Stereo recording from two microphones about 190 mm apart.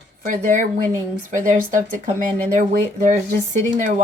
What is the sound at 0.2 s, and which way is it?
Speech, 45° right (ahead or behind).